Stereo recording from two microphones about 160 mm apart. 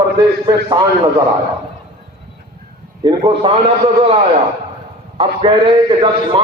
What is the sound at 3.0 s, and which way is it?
Speech, 30° right (ahead or behind).